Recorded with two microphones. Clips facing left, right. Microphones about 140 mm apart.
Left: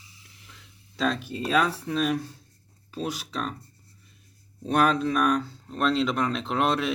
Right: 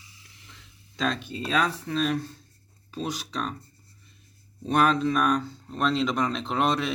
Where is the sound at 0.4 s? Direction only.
5° left (ahead or behind).